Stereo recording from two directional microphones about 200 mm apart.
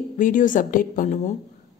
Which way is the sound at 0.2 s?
40° left (ahead or behind).